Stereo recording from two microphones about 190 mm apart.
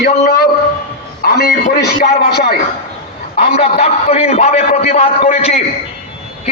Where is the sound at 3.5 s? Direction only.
35° left (ahead or behind).